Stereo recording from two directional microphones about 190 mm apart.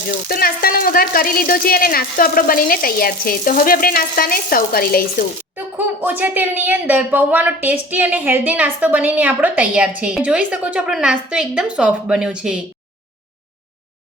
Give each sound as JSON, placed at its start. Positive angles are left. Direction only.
{"t": 0.3, "sound": "speech", "side_deg": 50}
{"t": 5.5, "sound": "a woman's voice", "side_deg": -10}